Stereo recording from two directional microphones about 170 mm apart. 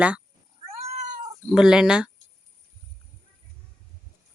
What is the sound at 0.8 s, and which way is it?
Cat, 40° right (ahead or behind).